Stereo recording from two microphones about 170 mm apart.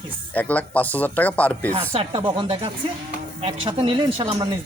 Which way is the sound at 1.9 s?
35° right (ahead or behind).